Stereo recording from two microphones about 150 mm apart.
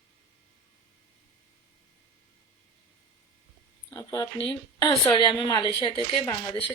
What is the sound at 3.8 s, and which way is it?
A woman's voice, 25° left (ahead or behind).